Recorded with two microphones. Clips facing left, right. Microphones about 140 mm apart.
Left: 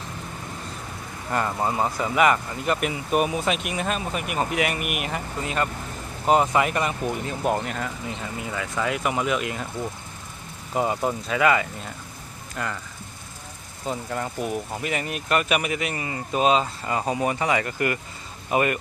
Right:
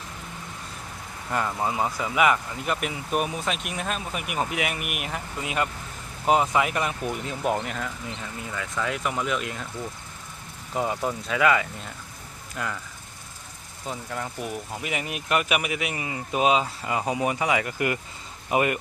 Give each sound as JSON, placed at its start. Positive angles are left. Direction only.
{"t": 1.3, "sound": "speech", "side_deg": 0}
{"t": 5.4, "sound": "speech", "side_deg": -10}
{"t": 10.8, "sound": "speech", "side_deg": 5}
{"t": 13.8, "sound": "speech", "side_deg": 5}
{"t": 14.8, "sound": "speech", "side_deg": -10}